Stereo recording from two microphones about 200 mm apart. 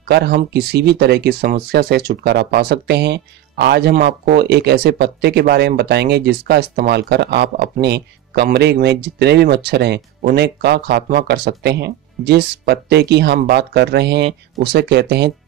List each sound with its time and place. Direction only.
0.1 s speech: 55° right (ahead or behind)